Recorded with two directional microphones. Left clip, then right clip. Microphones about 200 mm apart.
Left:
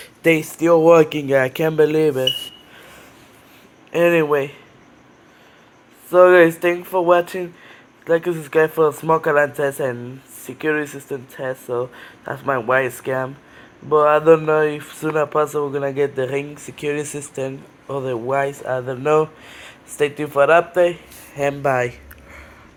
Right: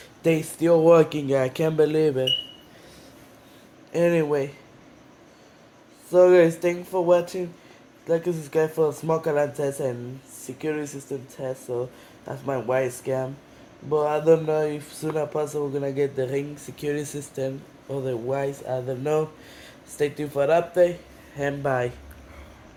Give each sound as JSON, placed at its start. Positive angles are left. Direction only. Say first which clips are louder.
{"t": 0.0, "sound": "speech", "louder": "left 6 dB", "side_deg": 5}
{"t": 3.9, "sound": "speech", "louder": "left 6 dB", "side_deg": 0}
{"t": 6.1, "sound": "speech", "louder": "left 5 dB", "side_deg": 0}
{"t": 13.9, "sound": "speech", "louder": "left 7 dB", "side_deg": 5}
{"t": 15.4, "sound": "speech", "louder": "left 6 dB", "side_deg": 25}
{"t": 15.7, "sound": "speech", "louder": "left 5 dB", "side_deg": 0}
{"t": 21.3, "sound": "speech", "louder": "left 6 dB", "side_deg": 15}